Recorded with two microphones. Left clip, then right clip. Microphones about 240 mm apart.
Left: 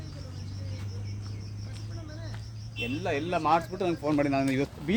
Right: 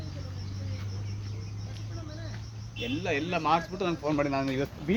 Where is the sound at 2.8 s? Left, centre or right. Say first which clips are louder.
Even; left.